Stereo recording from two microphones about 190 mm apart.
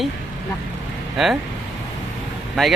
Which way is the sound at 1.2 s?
Centre (ahead or behind).